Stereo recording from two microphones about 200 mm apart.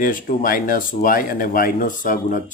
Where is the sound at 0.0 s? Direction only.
45° left (ahead or behind).